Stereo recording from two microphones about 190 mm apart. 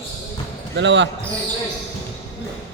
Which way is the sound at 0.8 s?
70° right (ahead or behind).